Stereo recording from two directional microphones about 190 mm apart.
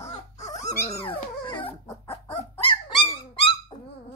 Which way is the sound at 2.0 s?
30° left (ahead or behind).